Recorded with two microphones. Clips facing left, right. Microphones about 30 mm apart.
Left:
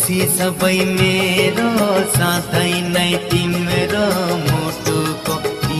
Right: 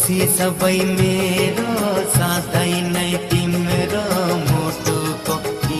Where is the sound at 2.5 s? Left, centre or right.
Left.